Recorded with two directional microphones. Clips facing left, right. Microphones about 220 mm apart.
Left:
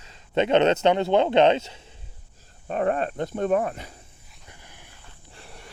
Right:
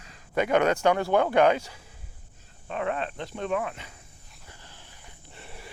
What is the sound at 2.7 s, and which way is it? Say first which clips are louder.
Speech: left 6 dB; 45° left (ahead or behind).